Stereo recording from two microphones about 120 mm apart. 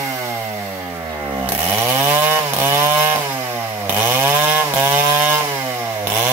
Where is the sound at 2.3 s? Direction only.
20° right (ahead or behind).